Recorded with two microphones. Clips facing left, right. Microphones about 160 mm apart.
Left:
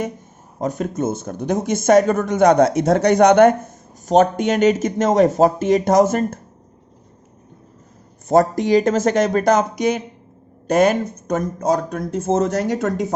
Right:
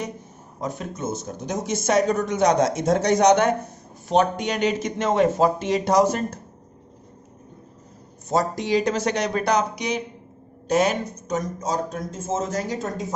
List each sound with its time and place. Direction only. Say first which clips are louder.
0.6 s speech: left 7 dB; 50° left (ahead or behind)
8.3 s speech: left 7 dB; 50° left (ahead or behind); by 13.1 s 70° left (ahead or behind)